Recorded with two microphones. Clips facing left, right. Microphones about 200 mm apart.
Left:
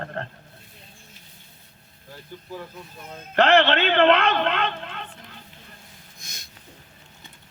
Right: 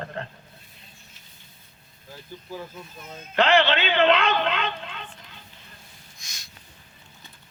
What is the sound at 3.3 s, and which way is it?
A woman's voice, 60° left (ahead or behind).